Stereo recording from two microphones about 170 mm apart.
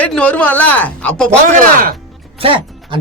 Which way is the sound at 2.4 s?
30° right (ahead or behind).